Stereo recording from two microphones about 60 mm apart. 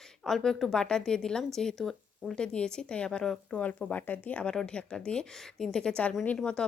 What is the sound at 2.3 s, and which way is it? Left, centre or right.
Speech, centre.